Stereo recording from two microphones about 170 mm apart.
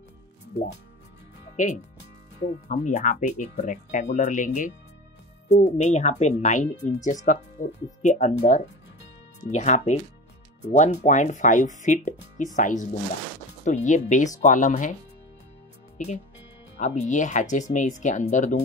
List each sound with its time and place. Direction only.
1.6 s speech: 45° left (ahead or behind)
9.5 s speech: 45° left (ahead or behind)
16.0 s speech: 45° left (ahead or behind)